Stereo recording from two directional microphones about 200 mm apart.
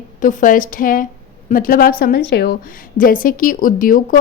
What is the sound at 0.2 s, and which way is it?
Speech, 40° left (ahead or behind).